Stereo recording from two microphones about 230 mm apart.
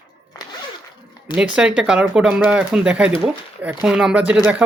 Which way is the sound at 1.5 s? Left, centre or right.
Centre.